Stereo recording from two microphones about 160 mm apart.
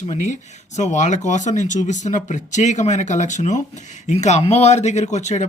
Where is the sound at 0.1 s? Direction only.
45° left (ahead or behind).